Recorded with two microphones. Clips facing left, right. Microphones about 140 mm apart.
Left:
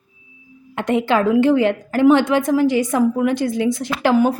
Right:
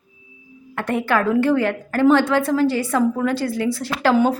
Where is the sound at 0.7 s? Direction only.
20° left (ahead or behind).